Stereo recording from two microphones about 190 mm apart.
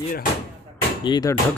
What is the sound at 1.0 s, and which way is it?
Speech, 20° left (ahead or behind).